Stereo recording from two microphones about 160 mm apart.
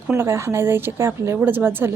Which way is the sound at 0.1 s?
15° right (ahead or behind).